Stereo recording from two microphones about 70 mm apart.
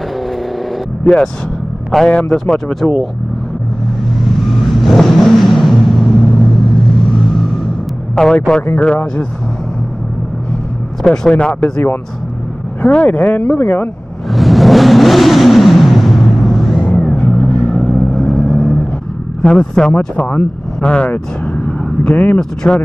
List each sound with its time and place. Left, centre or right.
1.0 s speech: centre
4.8 s vehicle: centre
8.2 s speech: centre
11.1 s speech: centre
12.8 s speech: centre
14.3 s vehicle: centre
16.8 s vehicle: centre
17.3 s vehicle: centre
19.4 s speech: centre
20.8 s vehicle: centre
22.4 s speech: centre